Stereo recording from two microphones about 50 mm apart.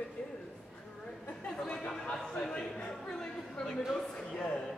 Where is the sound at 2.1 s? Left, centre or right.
Centre.